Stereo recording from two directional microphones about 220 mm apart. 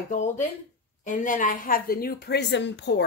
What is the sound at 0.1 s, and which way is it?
A woman's voice, 35° left (ahead or behind).